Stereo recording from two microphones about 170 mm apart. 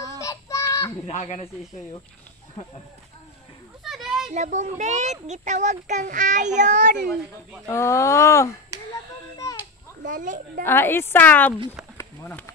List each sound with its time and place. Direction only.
0.2 s child singing: 20° left (ahead or behind)
1.0 s speech: 40° left (ahead or behind)
3.8 s a sound: centre (ahead or behind)
4.3 s a child's voice: 45° right (ahead or behind)
7.0 s speech: centre (ahead or behind)
7.6 s a woman's voice: 15° left (ahead or behind)
8.7 s chop: 20° right (ahead or behind)
10.0 s a child's voice: 50° right (ahead or behind)
10.6 s a woman's voice: 15° left (ahead or behind)